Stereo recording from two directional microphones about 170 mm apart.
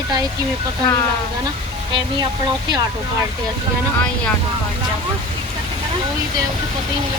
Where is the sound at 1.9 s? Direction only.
25° right (ahead or behind).